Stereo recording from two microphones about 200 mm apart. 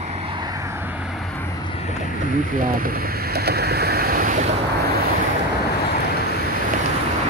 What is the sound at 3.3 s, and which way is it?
Ocean, 55° right (ahead or behind).